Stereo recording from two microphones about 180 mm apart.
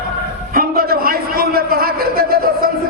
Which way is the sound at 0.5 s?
55° right (ahead or behind).